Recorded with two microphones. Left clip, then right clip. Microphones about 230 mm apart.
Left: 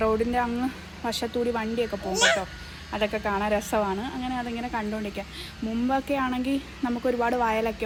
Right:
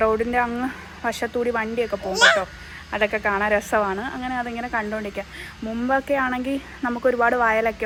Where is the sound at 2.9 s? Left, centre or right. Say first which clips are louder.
Right 5 dB; right.